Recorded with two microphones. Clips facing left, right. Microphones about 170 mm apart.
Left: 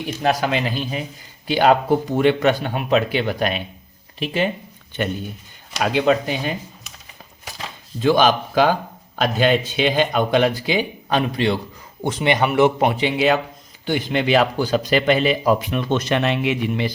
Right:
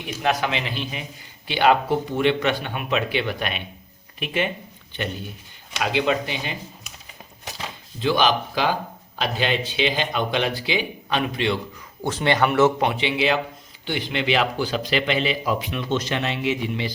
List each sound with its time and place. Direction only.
0.2 s speech: 40° left (ahead or behind)
5.7 s speech: 45° left (ahead or behind)
8.0 s speech: 45° left (ahead or behind)
12.0 s a man's voice: 15° left (ahead or behind)
12.9 s speech: 45° left (ahead or behind)